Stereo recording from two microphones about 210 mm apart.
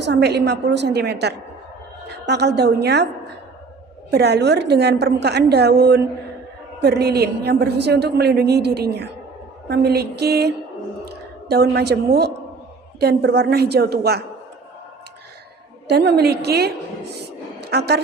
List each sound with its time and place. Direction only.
0.0 s a woman's voice: 50° right (ahead or behind)
4.1 s a woman's voice: 50° right (ahead or behind)
15.9 s a woman's voice: 50° right (ahead or behind)